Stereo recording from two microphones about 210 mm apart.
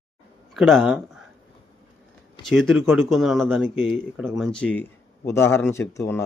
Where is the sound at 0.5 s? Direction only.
Centre (ahead or behind).